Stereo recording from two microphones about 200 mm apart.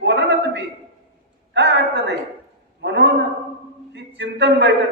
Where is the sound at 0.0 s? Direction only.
60° right (ahead or behind).